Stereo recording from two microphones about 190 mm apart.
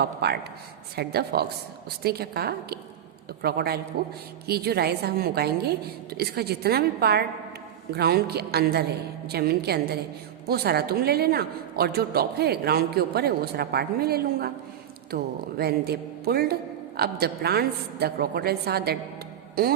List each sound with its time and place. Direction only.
0.0 s a woman's voice: 60° right (ahead or behind)